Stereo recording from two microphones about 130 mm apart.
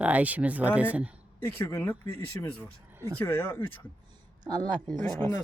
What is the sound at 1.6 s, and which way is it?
Speech, 20° left (ahead or behind).